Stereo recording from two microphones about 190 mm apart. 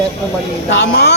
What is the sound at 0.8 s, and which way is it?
Speech, 60° left (ahead or behind).